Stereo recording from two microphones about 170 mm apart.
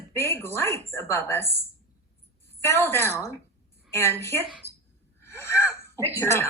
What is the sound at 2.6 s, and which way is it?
A woman's voice, 15° left (ahead or behind).